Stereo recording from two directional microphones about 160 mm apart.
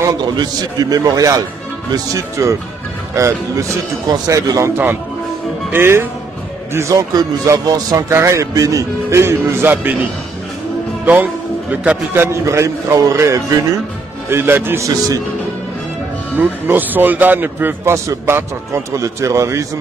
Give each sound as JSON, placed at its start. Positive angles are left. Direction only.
{"t": 0.0, "sound": "a man's voice", "side_deg": -25}
{"t": 11.7, "sound": "a man's voice", "side_deg": -10}
{"t": 16.3, "sound": "a man's voice", "side_deg": -10}